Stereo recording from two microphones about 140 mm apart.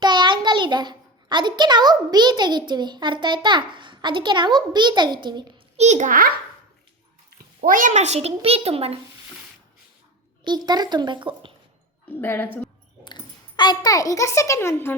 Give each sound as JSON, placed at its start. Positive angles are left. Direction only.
{"t": 0.0, "sound": "a child's voice", "side_deg": -30}
{"t": 5.7, "sound": "a child's voice", "side_deg": -55}
{"t": 10.4, "sound": "a woman's voice", "side_deg": -30}
{"t": 12.2, "sound": "a woman's voice", "side_deg": 15}
{"t": 13.1, "sound": "a child's voice", "side_deg": 30}